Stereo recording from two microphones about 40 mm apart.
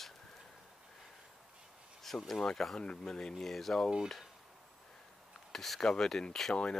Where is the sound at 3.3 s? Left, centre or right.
Centre.